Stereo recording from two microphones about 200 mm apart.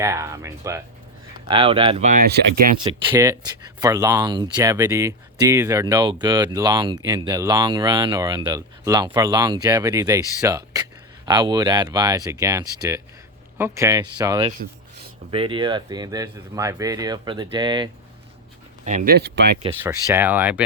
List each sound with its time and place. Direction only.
0.0 s speech: 15° right (ahead or behind)
1.5 s speech: 25° right (ahead or behind)
2.2 s speech: 50° right (ahead or behind)
3.1 s speech: 10° right (ahead or behind)
18.9 s speech: 40° right (ahead or behind)
19.1 s speech: 55° right (ahead or behind)
19.8 s speech: 10° right (ahead or behind)